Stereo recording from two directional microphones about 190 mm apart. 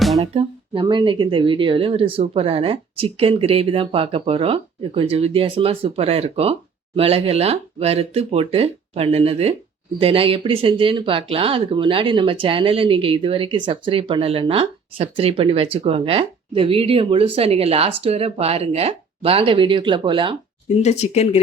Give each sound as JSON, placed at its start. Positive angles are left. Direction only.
{"t": 0.2, "sound": "speech", "side_deg": -30}
{"t": 20.8, "sound": "speech", "side_deg": 35}